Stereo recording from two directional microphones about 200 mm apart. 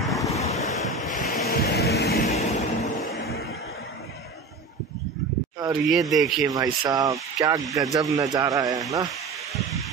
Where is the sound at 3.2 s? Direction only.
50° left (ahead or behind).